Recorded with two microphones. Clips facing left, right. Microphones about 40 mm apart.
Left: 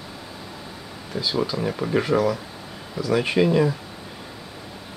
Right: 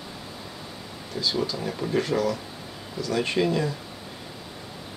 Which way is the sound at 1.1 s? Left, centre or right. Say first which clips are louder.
Left 3 dB; centre.